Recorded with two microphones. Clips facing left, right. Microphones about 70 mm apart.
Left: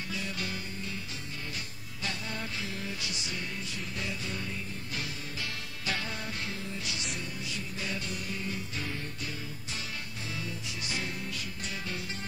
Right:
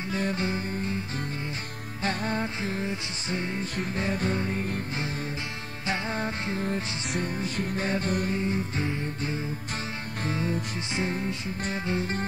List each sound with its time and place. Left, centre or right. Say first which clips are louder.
0.1 s music: right 10 dB; right
2.0 s music: right 9 dB; right
5.9 s music: right 6 dB; right
8.4 s music: right 8 dB; right